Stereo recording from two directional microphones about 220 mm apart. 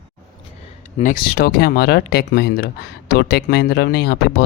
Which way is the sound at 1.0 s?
40° left (ahead or behind).